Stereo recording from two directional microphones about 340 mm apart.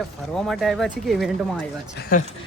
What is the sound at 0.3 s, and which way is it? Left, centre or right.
Speech, centre.